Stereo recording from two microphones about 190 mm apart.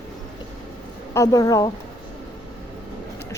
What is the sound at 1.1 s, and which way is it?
Speech, 15° left (ahead or behind).